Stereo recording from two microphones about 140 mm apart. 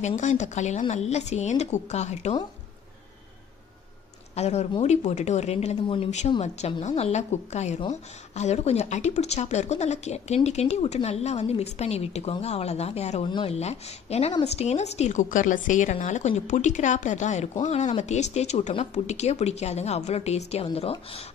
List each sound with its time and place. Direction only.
0.0 s speech: 60° left (ahead or behind)
4.4 s speech: 50° left (ahead or behind)
5.8 s speech: 40° left (ahead or behind)
6.0 s speech: 55° left (ahead or behind)